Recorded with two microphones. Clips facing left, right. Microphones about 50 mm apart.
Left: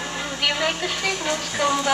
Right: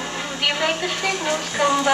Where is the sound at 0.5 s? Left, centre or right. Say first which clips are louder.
Right 2 dB; centre.